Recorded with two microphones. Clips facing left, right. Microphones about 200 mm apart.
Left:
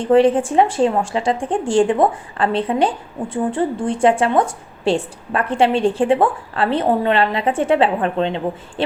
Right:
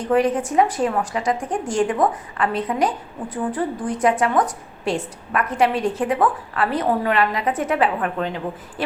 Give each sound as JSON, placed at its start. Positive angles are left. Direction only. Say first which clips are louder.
{"t": 0.0, "sound": "a woman's voice", "louder": "left 6 dB", "side_deg": 30}